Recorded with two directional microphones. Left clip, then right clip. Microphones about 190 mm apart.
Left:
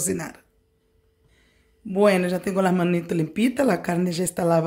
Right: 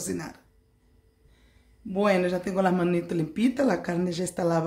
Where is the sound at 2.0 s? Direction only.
30° left (ahead or behind).